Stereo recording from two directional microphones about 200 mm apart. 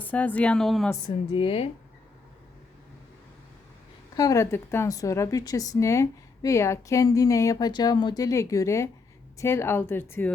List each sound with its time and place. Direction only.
0.0 s a woman's voice: 10° left (ahead or behind)
1.3 s speech: 25° left (ahead or behind)
4.1 s a woman's voice: 15° left (ahead or behind)